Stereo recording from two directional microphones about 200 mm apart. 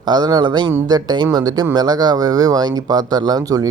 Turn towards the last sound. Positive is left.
turn(degrees=-20)  # may be behind; listen again after turning